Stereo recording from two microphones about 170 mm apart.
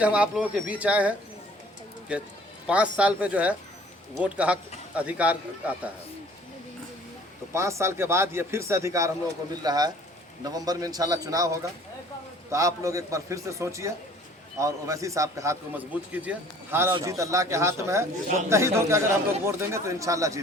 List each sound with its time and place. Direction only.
0.0 s speech: 5° right (ahead or behind)
7.5 s a man's voice: 15° right (ahead or behind)